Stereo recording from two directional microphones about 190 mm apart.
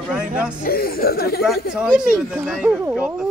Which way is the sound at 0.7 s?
50° left (ahead or behind).